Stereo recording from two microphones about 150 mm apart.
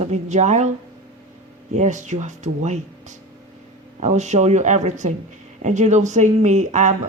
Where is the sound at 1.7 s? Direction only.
55° right (ahead or behind).